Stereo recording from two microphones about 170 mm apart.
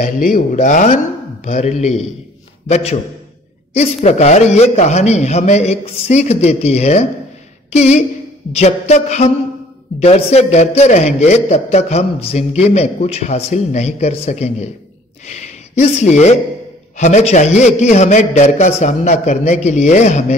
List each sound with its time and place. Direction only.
0.3 s a man's voice: 45° left (ahead or behind)